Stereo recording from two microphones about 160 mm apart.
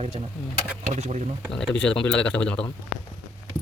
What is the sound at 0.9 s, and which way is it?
Speech, 45° right (ahead or behind).